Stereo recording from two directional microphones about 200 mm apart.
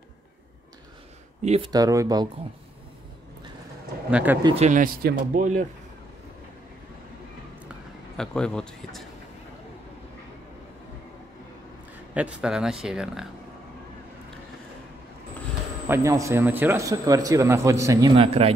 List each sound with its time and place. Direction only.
1.4 s speech: 30° right (ahead or behind)
1.7 s speech: 15° right (ahead or behind)
4.1 s speech: 10° right (ahead or behind)
4.6 s speech: 35° right (ahead or behind)
8.2 s speech: 5° left (ahead or behind)
12.1 s speech: 5° right (ahead or behind)
15.9 s speech: 15° right (ahead or behind)